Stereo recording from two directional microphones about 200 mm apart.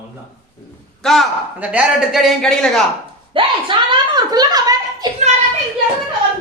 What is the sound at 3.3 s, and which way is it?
A woman's voice, 25° right (ahead or behind).